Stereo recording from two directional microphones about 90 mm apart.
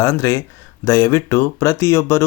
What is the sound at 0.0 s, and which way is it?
Speech, 35° left (ahead or behind).